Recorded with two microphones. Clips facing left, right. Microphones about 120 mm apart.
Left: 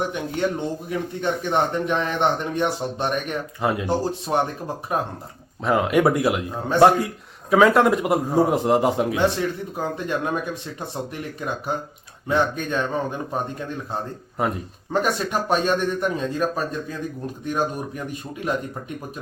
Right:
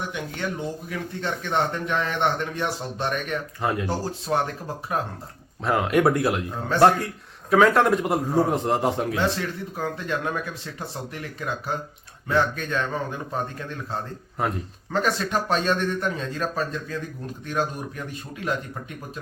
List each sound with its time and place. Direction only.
0.9 s speech: 20° left (ahead or behind)
3.6 s a man's voice: 5° left (ahead or behind)
3.8 s speech: 20° left (ahead or behind)
5.6 s a man's voice: centre (ahead or behind); by 13.4 s 20° left (ahead or behind)
15.0 s a man's voice: 10° left (ahead or behind)